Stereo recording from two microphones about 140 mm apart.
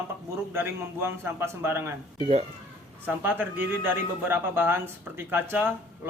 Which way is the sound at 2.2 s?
40° right (ahead or behind).